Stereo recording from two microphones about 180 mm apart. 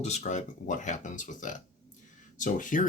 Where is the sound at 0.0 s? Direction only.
40° left (ahead or behind).